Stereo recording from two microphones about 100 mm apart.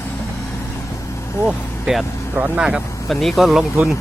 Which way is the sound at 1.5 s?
5° right (ahead or behind).